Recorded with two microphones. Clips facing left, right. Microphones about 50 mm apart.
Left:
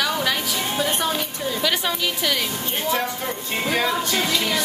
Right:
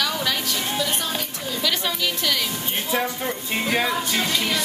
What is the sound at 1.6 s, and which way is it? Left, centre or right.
Speech, centre.